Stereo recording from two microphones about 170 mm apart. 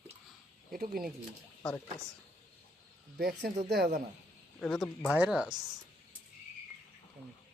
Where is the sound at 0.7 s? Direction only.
60° right (ahead or behind).